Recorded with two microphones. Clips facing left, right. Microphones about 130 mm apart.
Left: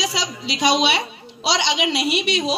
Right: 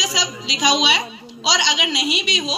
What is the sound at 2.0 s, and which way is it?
Speech, 60° left (ahead or behind).